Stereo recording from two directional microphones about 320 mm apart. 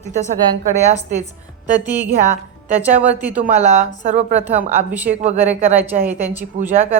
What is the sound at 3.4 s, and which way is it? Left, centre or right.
Speech, right.